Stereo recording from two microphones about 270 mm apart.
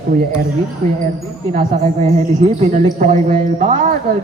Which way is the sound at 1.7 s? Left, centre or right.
Right.